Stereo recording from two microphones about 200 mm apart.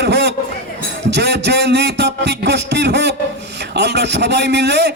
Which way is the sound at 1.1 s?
60° right (ahead or behind).